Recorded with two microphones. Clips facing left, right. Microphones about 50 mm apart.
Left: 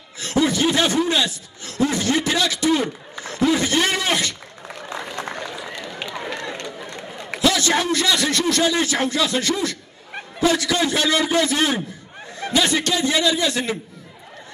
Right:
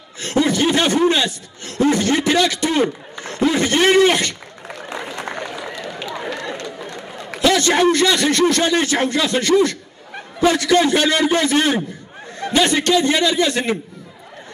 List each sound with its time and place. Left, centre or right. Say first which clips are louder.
0.2 s speech: right 2 dB; right
6.9 s a sound: right 1 dB; right
8.1 s speech: right 4 dB; right